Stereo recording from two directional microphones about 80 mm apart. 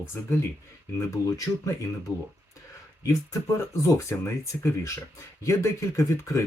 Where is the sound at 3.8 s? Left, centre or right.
Left.